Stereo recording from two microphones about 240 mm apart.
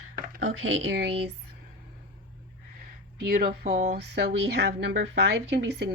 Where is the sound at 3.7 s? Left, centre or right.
Right.